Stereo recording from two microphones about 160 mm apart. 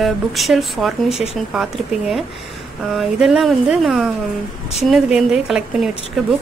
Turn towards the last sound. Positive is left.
turn(degrees=-5)  # may be behind; listen again after turning